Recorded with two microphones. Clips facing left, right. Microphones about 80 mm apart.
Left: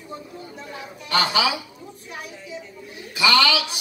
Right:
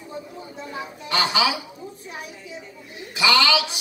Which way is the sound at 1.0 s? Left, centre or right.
Right.